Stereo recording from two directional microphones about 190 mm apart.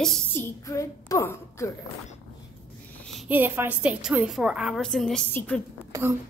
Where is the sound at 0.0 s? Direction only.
5° left (ahead or behind).